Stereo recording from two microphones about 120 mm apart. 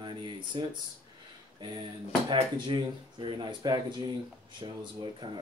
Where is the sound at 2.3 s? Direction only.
40° right (ahead or behind).